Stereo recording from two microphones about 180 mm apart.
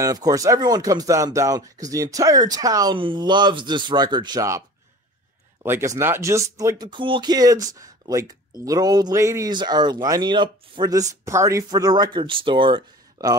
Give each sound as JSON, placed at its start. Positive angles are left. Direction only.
{"t": 0.0, "sound": "speech", "side_deg": -20}